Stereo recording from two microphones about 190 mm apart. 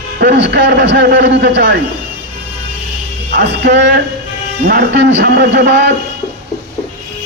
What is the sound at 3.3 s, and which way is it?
Speech, 65° right (ahead or behind).